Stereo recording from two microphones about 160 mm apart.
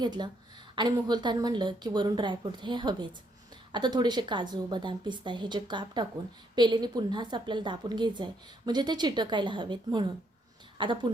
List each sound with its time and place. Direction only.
0.0 s a woman's voice: 25° right (ahead or behind)